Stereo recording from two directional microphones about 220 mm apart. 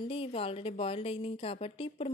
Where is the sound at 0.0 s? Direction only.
25° left (ahead or behind).